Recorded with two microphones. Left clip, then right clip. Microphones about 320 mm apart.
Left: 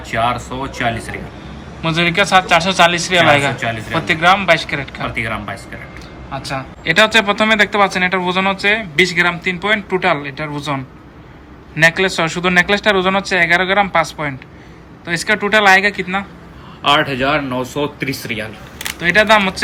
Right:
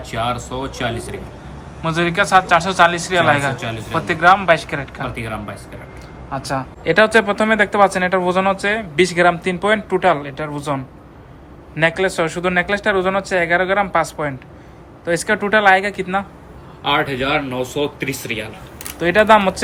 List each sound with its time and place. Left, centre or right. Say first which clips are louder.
0.1 s speech: left 5 dB; centre
17.1 s speech: left 3 dB; left
17.5 s speech: left 1 dB; left
18.9 s speech: left 1 dB; centre